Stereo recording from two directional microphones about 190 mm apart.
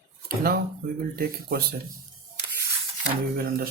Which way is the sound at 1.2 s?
55° right (ahead or behind).